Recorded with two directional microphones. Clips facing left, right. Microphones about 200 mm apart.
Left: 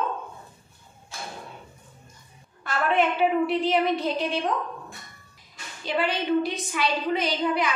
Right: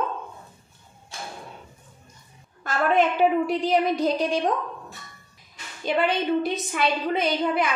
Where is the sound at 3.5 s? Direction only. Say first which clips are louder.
Right 1 dB; 40° right (ahead or behind).